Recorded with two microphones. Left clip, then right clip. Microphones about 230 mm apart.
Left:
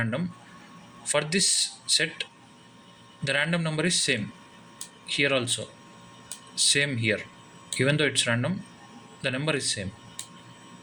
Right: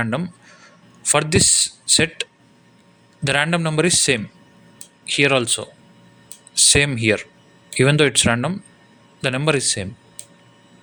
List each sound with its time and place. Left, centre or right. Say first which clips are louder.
0.0 s speech: right 7 dB; right
3.2 s speech: right 7 dB; right